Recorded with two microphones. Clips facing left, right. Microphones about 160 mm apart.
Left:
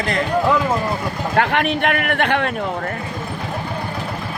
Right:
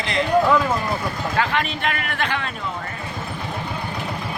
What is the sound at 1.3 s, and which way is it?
A man's voice, 60° left (ahead or behind).